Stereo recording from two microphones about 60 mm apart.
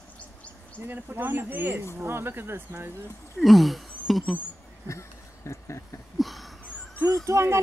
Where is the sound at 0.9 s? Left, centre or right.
Right.